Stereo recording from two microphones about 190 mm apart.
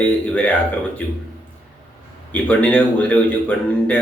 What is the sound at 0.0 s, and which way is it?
Speech, 5° left (ahead or behind).